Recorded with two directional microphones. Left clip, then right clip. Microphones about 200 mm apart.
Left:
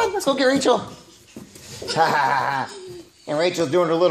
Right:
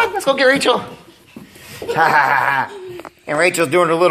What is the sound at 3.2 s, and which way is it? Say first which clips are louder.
Speech: right 6 dB; 5° right (ahead or behind).